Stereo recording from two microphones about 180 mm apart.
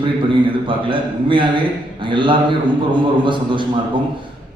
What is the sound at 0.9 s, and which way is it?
A man's voice, 25° right (ahead or behind).